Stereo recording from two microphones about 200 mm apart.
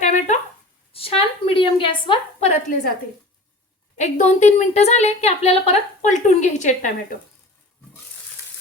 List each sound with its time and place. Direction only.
0.0 s a sound: 40° left (ahead or behind)
2.6 s a woman's voice: 40° left (ahead or behind)
3.9 s a woman's voice: 35° left (ahead or behind)